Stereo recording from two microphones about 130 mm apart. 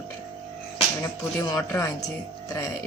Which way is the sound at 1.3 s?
25° left (ahead or behind).